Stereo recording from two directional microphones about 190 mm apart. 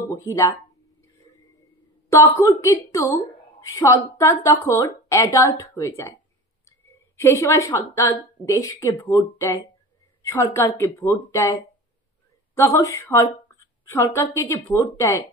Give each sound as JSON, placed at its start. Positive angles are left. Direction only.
{"t": 0.1, "sound": "speech", "side_deg": 15}
{"t": 2.0, "sound": "a woman's voice", "side_deg": 15}
{"t": 12.5, "sound": "a woman's voice", "side_deg": 15}